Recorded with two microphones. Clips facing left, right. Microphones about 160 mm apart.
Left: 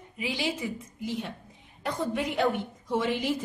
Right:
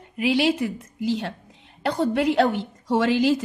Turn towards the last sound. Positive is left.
turn(degrees=-90)